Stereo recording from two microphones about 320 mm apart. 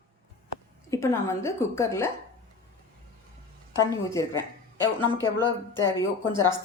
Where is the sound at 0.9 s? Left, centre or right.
Centre.